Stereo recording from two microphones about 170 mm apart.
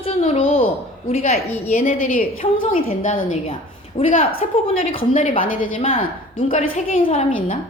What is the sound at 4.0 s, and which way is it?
Speech, 35° left (ahead or behind).